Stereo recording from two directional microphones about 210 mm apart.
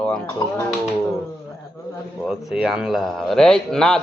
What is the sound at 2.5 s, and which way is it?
A man's voice, centre (ahead or behind).